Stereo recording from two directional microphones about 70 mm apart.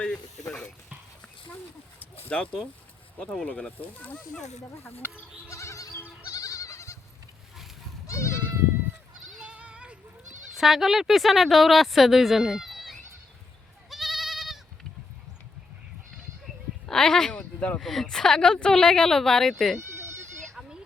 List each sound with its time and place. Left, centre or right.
2.2 s speech: centre
5.5 s goat: left
8.0 s goat: left
9.5 s goat: centre
10.6 s speech: centre
13.9 s goat: centre
16.8 s a sound: centre
17.7 s speech: centre
20.6 s goat: centre